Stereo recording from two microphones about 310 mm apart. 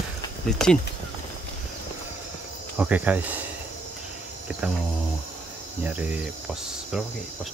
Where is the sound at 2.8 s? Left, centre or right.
Centre.